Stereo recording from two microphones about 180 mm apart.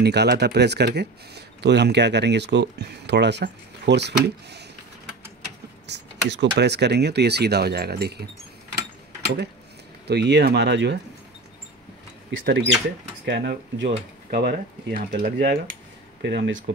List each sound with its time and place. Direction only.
0.0 s speech: 65° right (ahead or behind)
5.9 s speech: 75° right (ahead or behind)
10.0 s speech: 70° right (ahead or behind)
12.3 s speech: 80° right
13.2 s speech: 65° right (ahead or behind); by 16.6 s 80° right